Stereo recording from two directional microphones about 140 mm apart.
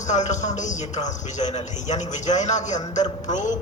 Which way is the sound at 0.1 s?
55° left (ahead or behind).